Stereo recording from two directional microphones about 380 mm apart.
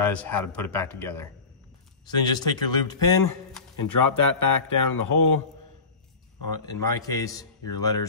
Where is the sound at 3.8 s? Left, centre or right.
Left.